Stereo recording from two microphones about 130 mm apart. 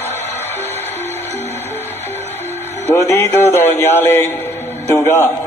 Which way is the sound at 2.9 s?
20° left (ahead or behind).